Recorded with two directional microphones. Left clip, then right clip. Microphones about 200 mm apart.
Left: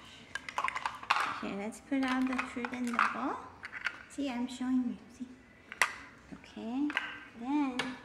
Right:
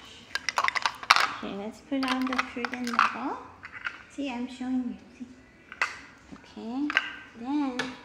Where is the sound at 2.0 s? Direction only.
45° right (ahead or behind).